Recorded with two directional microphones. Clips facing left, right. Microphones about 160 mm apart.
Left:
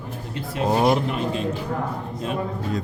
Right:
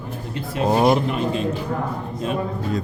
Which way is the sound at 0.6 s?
25° right (ahead or behind).